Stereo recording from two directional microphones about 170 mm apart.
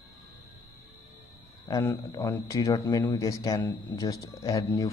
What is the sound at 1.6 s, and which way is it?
A man's voice, 15° left (ahead or behind).